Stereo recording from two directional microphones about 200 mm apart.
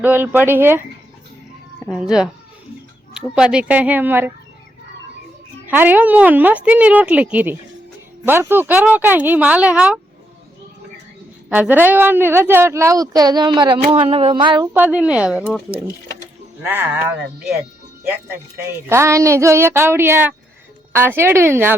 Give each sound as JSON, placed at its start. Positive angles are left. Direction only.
{"t": 0.0, "sound": "a woman's voice", "side_deg": -10}
{"t": 1.9, "sound": "a woman's voice", "side_deg": -5}
{"t": 5.6, "sound": "a woman's voice", "side_deg": -10}
{"t": 11.4, "sound": "a woman's voice", "side_deg": -5}
{"t": 14.7, "sound": "a woman's voice", "side_deg": -10}
{"t": 16.6, "sound": "a woman's voice", "side_deg": -10}
{"t": 18.9, "sound": "a woman's voice", "side_deg": -15}